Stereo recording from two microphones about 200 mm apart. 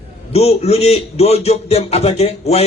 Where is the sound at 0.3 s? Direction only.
30° left (ahead or behind).